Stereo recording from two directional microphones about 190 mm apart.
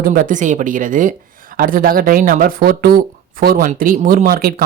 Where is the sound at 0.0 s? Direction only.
50° right (ahead or behind).